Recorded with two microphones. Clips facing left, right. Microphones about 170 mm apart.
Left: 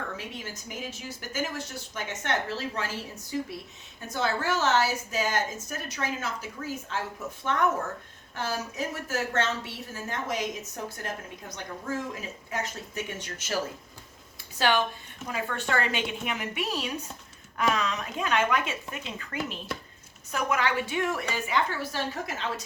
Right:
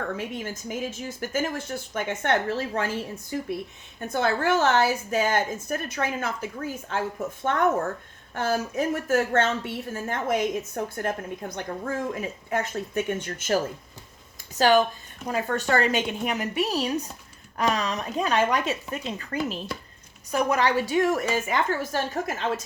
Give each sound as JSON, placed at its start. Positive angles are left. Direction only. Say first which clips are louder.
{"t": 0.2, "sound": "a woman's voice", "louder": "right 7 dB", "side_deg": -50}
{"t": 14.7, "sound": "a woman's voice", "louder": "right 6 dB", "side_deg": -40}